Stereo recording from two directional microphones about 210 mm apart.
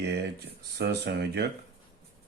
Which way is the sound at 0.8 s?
50° right (ahead or behind).